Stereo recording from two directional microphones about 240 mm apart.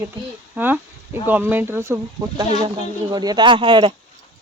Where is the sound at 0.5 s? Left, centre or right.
Centre.